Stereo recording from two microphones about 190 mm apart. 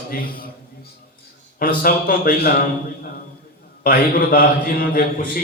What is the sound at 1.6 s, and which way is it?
Speech, 50° left (ahead or behind).